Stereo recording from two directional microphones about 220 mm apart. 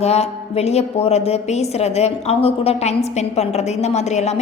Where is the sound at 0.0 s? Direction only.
30° left (ahead or behind).